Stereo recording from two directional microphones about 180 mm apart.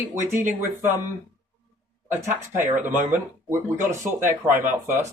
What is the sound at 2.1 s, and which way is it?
A man's voice, 15° right (ahead or behind).